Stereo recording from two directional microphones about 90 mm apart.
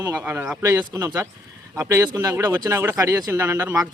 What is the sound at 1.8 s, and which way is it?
Speech, 35° right (ahead or behind).